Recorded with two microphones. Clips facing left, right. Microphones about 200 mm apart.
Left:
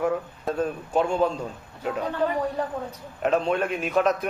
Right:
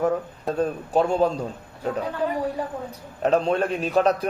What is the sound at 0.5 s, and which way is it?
Speech, 35° right (ahead or behind).